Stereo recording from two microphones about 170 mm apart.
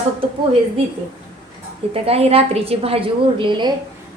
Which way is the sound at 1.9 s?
35° right (ahead or behind).